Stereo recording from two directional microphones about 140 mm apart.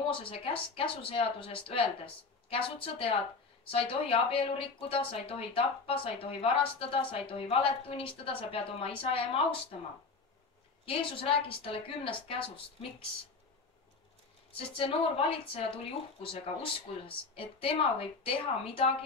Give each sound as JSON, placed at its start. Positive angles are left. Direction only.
{"t": 0.1, "sound": "speech", "side_deg": 40}
{"t": 10.9, "sound": "speech", "side_deg": 40}
{"t": 14.8, "sound": "speech", "side_deg": 40}